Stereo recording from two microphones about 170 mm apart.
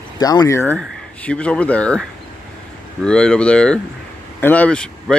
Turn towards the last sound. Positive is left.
turn(degrees=5)  # may be behind; listen again after turning